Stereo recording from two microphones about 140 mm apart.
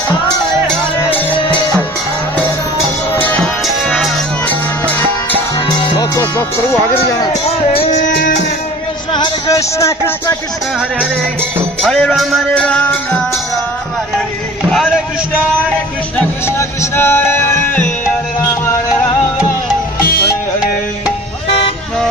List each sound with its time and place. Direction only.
3.1 s music: 15° left (ahead or behind)
5.5 s music: 25° left (ahead or behind)
7.7 s music: 40° left (ahead or behind)
9.1 s speech: 30° left (ahead or behind)
11.8 s music: 5° left (ahead or behind)
14.7 s a sound: centre (ahead or behind)
16.5 s music: 15° left (ahead or behind)